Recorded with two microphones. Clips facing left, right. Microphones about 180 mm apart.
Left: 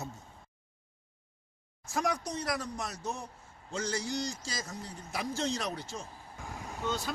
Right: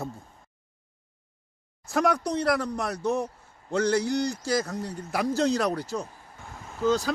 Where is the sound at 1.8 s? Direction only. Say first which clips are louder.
Right 8 dB; 65° right (ahead or behind).